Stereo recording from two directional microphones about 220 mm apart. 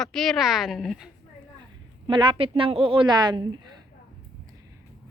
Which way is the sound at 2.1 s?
20° right (ahead or behind).